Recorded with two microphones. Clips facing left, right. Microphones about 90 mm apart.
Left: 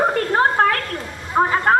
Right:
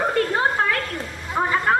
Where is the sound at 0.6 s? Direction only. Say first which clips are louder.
Left 5 dB; 50° left (ahead or behind).